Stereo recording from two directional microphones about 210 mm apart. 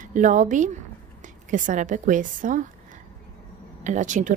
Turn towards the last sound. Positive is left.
turn(degrees=-35)  # may be behind; listen again after turning